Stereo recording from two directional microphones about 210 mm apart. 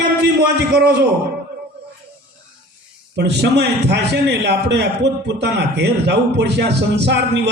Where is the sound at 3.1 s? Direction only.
55° right (ahead or behind).